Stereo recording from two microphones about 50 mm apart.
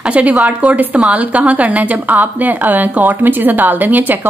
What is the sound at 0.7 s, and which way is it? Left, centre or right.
A woman's voice, right.